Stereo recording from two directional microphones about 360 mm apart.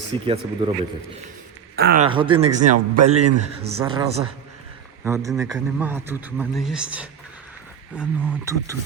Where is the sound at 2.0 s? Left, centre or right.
Centre.